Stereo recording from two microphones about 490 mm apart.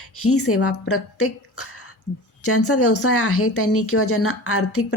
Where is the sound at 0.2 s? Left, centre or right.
Left.